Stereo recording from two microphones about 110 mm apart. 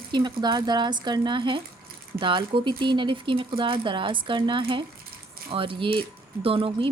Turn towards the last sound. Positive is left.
turn(degrees=-55)  # may be behind; listen again after turning